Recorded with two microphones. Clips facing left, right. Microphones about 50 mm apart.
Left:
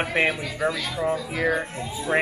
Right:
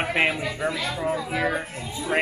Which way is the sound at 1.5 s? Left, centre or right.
Centre.